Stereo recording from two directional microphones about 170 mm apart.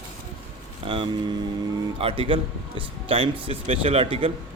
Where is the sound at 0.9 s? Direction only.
30° right (ahead or behind).